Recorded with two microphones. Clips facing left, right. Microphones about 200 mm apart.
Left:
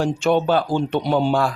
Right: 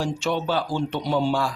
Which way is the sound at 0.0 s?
55° left (ahead or behind).